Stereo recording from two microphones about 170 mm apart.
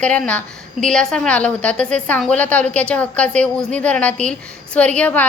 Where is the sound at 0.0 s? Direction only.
5° left (ahead or behind).